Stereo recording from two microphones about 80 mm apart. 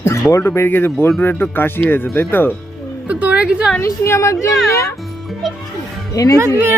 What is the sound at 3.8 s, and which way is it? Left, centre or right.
A woman's voice, left.